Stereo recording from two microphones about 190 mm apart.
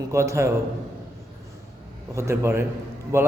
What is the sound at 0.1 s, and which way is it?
Speech, 15° right (ahead or behind).